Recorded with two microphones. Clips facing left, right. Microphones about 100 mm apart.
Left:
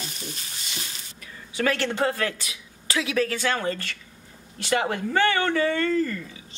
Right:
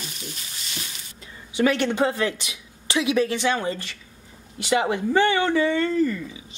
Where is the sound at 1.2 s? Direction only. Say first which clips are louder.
Right 4 dB; 20° right (ahead or behind).